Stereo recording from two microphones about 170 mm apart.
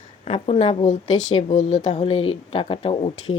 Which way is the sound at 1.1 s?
25° left (ahead or behind).